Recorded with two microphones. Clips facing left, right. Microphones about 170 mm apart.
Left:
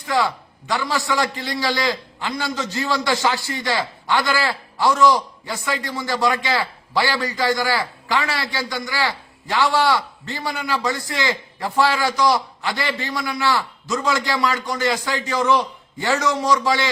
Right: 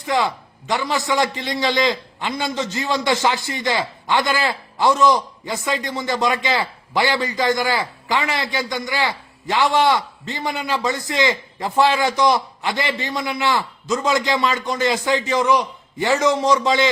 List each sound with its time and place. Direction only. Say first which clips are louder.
0.0 s a man's voice: right 1 dB; 20° right (ahead or behind)